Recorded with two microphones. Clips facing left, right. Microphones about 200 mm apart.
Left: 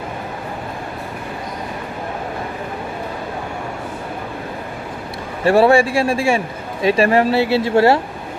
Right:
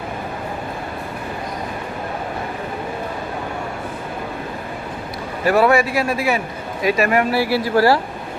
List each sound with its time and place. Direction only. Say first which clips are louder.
5.5 s speech: left 3 dB; 30° left (ahead or behind)